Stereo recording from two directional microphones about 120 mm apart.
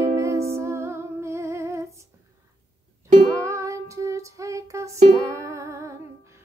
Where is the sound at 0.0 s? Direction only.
25° right (ahead or behind).